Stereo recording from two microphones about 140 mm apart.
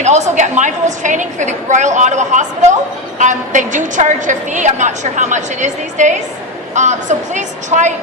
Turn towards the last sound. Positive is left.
turn(degrees=-60)  # may be behind; listen again after turning